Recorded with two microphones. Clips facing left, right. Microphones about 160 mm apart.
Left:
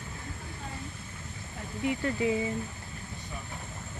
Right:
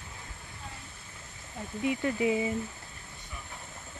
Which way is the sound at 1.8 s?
15° right (ahead or behind).